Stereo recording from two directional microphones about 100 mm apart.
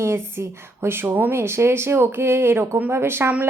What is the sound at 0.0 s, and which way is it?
Speech, 25° right (ahead or behind).